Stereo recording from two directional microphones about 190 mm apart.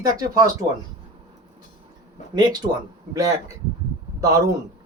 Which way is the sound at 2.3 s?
20° right (ahead or behind).